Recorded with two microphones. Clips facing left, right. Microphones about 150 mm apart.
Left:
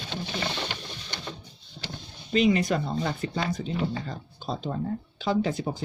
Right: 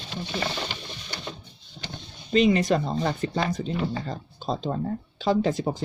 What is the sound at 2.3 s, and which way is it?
Speech, 35° right (ahead or behind).